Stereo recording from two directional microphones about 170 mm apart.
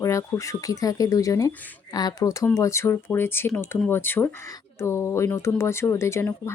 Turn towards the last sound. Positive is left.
turn(degrees=15)  # may be behind; listen again after turning